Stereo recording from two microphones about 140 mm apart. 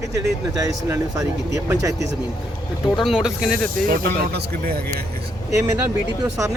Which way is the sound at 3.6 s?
90° right.